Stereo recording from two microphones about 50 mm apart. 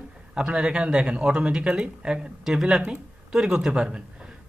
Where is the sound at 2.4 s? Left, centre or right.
Centre.